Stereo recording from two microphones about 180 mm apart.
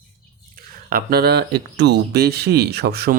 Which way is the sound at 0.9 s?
60° right (ahead or behind).